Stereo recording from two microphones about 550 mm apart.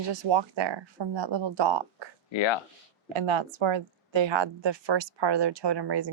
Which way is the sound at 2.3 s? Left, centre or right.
Left.